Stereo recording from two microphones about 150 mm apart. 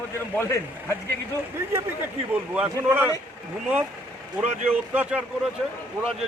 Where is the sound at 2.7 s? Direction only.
15° right (ahead or behind).